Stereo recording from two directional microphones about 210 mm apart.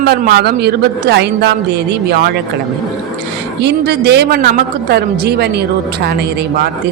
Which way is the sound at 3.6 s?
50° right (ahead or behind).